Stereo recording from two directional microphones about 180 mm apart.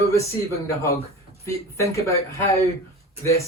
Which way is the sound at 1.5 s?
15° left (ahead or behind).